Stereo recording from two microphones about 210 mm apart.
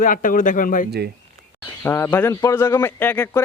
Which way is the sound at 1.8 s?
10° left (ahead or behind).